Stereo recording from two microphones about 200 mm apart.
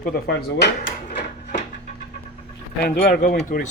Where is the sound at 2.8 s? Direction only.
50° left (ahead or behind).